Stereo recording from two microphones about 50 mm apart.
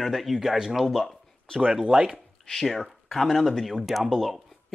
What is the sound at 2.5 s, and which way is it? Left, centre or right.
Speech, centre.